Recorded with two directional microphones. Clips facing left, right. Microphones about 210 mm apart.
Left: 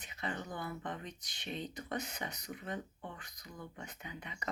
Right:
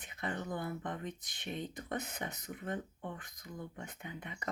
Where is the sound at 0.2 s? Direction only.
50° right (ahead or behind).